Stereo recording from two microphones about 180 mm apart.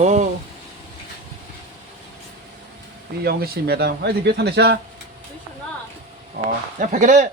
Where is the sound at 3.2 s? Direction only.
60° right (ahead or behind).